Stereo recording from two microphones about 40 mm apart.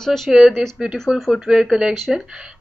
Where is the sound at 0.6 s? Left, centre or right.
Right.